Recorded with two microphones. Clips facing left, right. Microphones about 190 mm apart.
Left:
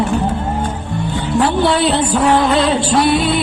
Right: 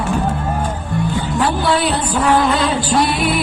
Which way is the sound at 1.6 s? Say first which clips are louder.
Left 3 dB; 25° left (ahead or behind).